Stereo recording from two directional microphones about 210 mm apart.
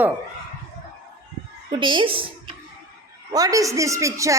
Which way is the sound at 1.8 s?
25° right (ahead or behind).